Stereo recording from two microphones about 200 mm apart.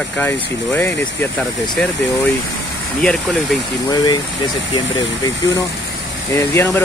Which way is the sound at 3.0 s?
5° left (ahead or behind).